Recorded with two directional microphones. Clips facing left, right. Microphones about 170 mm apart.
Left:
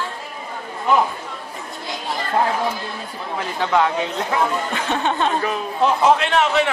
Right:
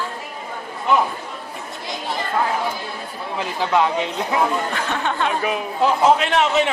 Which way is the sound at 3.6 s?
10° right (ahead or behind).